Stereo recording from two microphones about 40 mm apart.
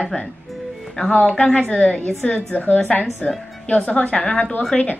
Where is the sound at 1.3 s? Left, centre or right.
Left.